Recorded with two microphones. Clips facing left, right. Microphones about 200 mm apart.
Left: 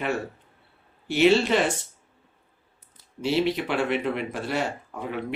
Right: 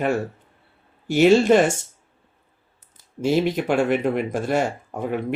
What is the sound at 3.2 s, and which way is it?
Speech, 45° right (ahead or behind).